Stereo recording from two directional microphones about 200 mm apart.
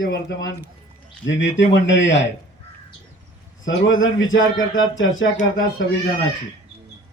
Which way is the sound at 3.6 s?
80° left.